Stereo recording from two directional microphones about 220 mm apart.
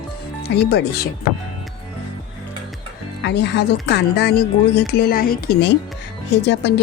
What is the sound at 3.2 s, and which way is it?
Speech, 50° left (ahead or behind).